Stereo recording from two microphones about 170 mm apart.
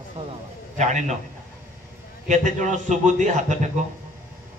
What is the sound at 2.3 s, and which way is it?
A man's voice, 45° right (ahead or behind).